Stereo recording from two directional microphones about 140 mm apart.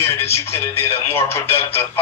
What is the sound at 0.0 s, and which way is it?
Speech, 15° left (ahead or behind).